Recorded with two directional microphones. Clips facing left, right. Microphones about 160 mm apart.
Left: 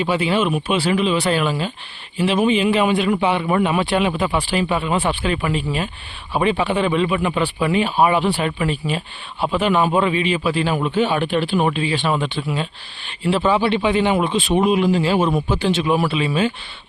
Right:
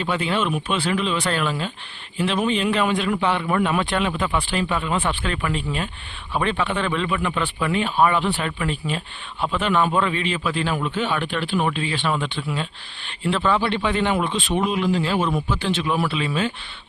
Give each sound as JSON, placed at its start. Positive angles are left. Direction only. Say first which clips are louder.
{"t": 0.0, "sound": "a man's voice", "louder": "left 4 dB", "side_deg": 5}